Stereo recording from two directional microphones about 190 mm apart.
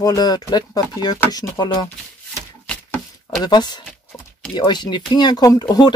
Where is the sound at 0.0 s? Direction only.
20° left (ahead or behind).